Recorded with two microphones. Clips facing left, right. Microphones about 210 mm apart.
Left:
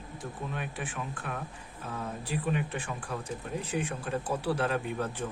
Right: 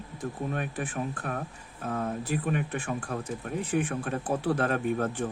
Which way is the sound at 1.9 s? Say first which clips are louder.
Right 5 dB; 55° right (ahead or behind).